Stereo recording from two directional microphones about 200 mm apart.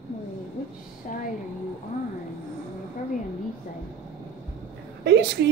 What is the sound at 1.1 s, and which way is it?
Speech, 40° left (ahead or behind).